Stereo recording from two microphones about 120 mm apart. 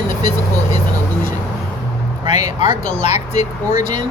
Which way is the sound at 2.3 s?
70° left (ahead or behind).